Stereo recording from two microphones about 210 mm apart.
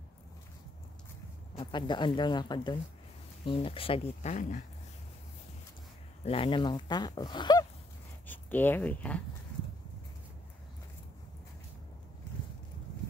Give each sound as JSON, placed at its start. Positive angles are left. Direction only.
{"t": 1.6, "sound": "speech", "side_deg": 20}
{"t": 6.2, "sound": "speech", "side_deg": 25}
{"t": 8.3, "sound": "speech", "side_deg": 10}